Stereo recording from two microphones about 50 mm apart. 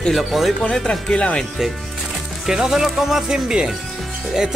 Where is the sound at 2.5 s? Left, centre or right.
Centre.